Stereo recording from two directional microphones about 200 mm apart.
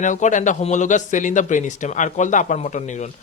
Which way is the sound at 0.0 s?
40° left (ahead or behind).